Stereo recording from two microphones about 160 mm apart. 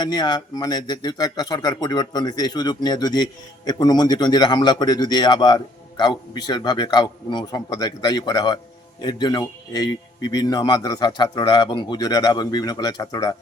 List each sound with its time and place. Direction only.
0.0 s speech: 25° left (ahead or behind)